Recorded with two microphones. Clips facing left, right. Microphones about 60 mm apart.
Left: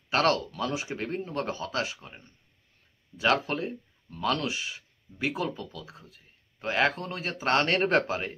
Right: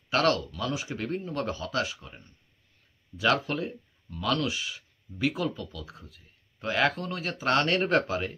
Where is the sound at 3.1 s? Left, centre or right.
Left.